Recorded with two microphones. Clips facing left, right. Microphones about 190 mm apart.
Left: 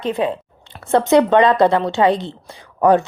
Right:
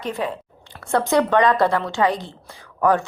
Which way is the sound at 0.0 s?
25° left (ahead or behind).